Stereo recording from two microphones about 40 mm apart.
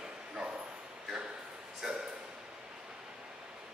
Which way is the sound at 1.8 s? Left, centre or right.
Centre.